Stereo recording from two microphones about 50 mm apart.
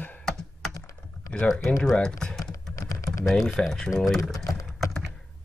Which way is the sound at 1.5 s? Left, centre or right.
Centre.